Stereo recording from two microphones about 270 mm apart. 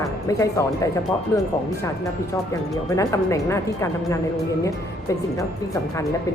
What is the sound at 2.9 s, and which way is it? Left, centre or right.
Speech, centre.